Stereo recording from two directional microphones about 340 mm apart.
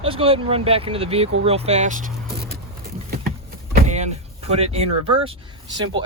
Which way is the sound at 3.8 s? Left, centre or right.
Centre.